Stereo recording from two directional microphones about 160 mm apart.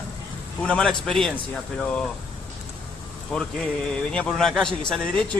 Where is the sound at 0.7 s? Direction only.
5° left (ahead or behind).